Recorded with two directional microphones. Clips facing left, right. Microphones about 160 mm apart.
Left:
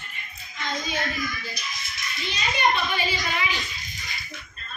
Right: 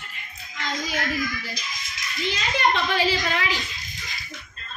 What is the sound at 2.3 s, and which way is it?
A child's voice, 90° right.